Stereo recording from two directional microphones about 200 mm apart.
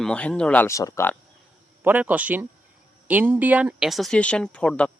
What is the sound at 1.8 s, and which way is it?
A man's voice, 10° right (ahead or behind).